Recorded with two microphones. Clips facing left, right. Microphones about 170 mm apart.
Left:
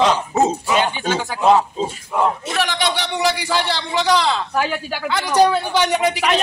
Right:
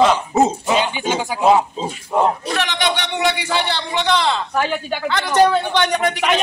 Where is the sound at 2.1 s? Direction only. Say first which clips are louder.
Right 2 dB; 30° right (ahead or behind).